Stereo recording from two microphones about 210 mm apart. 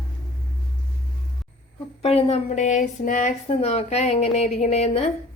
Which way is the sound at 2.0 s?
30° left (ahead or behind).